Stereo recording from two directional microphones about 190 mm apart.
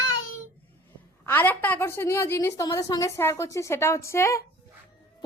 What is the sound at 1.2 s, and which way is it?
A woman's voice, 10° left (ahead or behind).